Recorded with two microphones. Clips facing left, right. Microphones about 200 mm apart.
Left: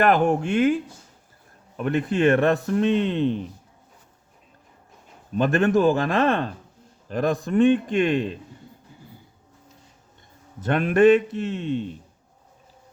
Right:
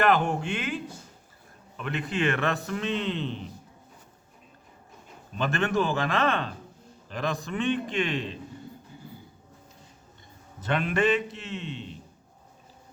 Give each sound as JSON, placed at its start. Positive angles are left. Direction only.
{"t": 0.0, "sound": "speech", "side_deg": 50}
{"t": 5.4, "sound": "speech", "side_deg": 45}
{"t": 10.6, "sound": "speech", "side_deg": 50}